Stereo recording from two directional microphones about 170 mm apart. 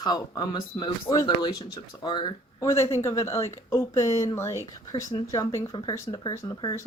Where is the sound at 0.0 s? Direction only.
25° left (ahead or behind).